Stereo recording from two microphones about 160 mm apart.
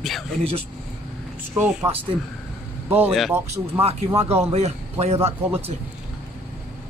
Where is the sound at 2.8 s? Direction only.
10° right (ahead or behind).